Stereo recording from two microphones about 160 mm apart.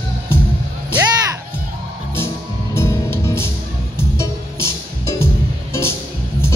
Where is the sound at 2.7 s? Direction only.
15° left (ahead or behind).